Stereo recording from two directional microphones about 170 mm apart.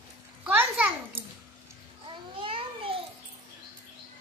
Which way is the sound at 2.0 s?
30° right (ahead or behind).